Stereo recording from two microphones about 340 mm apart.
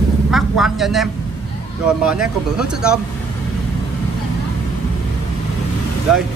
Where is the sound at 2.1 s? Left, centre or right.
Centre.